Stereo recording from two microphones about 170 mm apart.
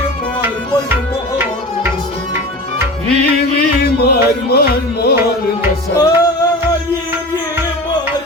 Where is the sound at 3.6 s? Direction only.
65° left (ahead or behind).